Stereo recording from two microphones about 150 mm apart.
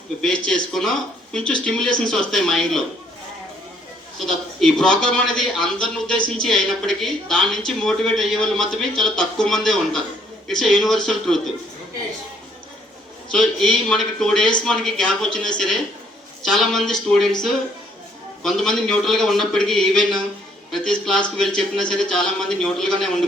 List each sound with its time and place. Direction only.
0.2 s a man's voice: 5° left (ahead or behind)
4.2 s a man's voice: 5° left (ahead or behind)
13.3 s a man's voice: 5° left (ahead or behind)
18.4 s a man's voice: 5° left (ahead or behind)